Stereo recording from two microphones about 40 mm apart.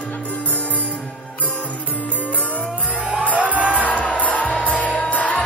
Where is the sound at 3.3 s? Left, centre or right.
Right.